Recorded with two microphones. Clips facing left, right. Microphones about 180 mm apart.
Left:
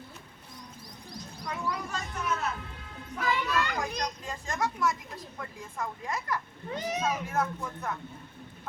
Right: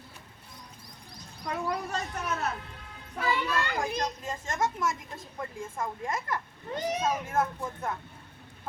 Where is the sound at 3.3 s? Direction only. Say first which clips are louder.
Even; 10° right (ahead or behind).